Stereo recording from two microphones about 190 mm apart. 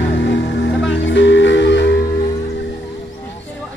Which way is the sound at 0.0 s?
70° left (ahead or behind).